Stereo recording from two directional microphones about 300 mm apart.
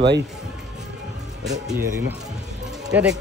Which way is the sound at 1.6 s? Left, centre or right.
Centre.